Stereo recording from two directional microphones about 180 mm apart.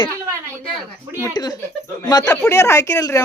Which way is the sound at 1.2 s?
20° left (ahead or behind).